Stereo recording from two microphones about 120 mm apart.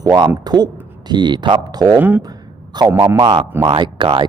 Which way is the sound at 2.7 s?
35° right (ahead or behind).